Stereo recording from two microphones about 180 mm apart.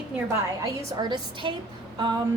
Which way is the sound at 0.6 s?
20° right (ahead or behind).